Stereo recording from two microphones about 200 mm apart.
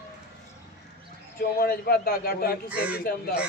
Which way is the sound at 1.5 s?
50° left (ahead or behind).